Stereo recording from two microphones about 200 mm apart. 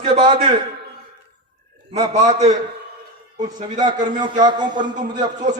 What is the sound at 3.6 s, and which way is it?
A man's voice, 20° right (ahead or behind).